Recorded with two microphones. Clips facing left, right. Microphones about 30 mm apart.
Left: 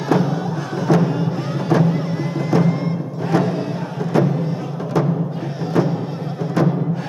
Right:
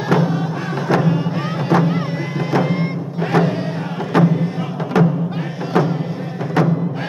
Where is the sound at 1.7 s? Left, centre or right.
Right.